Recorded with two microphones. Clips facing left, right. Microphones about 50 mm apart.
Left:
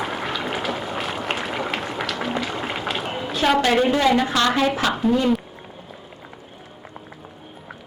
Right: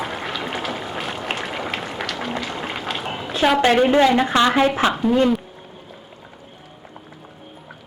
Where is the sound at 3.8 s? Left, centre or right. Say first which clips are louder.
Right 3 dB; centre.